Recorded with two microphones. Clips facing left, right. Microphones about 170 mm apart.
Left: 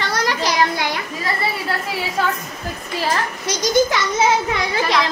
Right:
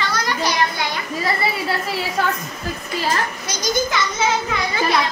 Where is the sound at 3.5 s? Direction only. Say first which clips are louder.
Left 7 dB; 75° left (ahead or behind).